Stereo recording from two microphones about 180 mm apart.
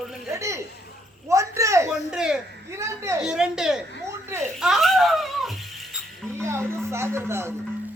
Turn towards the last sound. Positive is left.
turn(degrees=-15)  # may be behind; listen again after turning